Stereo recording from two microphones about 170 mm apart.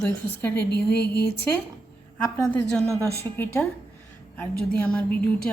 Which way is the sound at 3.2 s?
10° left (ahead or behind).